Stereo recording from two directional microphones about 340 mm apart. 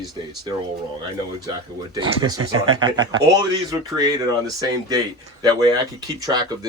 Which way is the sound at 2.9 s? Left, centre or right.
Centre.